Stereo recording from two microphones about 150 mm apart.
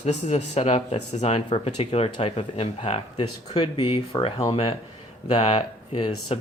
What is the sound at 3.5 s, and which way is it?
Speech, 30° left (ahead or behind).